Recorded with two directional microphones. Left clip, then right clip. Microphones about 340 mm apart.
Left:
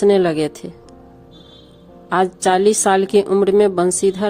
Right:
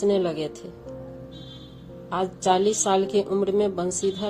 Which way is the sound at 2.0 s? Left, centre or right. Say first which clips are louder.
Left 7 dB; left.